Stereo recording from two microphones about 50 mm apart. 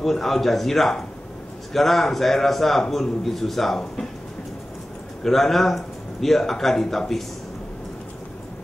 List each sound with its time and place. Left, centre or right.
0.0 s a man's voice: centre
5.2 s a man's voice: centre